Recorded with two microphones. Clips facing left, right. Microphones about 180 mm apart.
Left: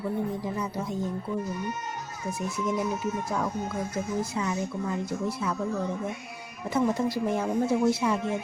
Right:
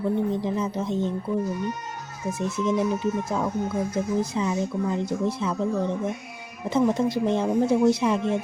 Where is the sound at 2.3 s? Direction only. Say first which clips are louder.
Right 5 dB; 25° right (ahead or behind).